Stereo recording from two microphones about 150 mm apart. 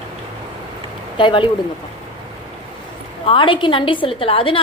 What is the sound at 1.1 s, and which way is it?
Speech, 35° left (ahead or behind).